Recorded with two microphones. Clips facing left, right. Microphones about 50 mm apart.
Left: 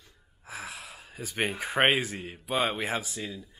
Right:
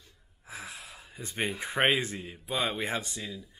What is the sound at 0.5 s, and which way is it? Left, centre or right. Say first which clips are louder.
Gasp: left 3 dB; centre.